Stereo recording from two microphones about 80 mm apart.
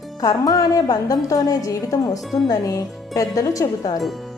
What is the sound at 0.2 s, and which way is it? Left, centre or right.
A woman's voice, left.